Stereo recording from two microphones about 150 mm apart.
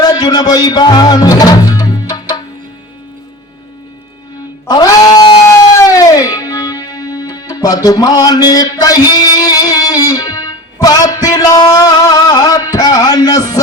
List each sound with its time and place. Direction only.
0.0 s music: 25° left (ahead or behind)
4.6 s music: 25° left (ahead or behind)